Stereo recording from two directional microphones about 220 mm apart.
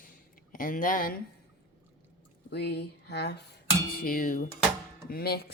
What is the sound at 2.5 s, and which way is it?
Speech, 50° left (ahead or behind).